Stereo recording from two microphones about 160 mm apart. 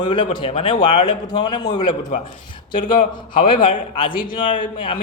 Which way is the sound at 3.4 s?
30° left (ahead or behind).